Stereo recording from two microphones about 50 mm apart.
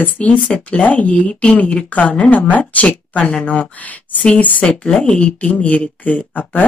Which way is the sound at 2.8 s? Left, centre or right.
Left.